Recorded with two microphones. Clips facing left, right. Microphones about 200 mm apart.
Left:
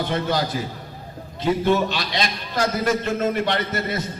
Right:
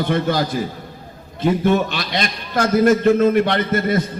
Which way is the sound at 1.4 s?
55° right (ahead or behind).